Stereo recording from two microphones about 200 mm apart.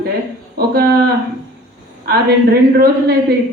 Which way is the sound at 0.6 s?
50° right (ahead or behind).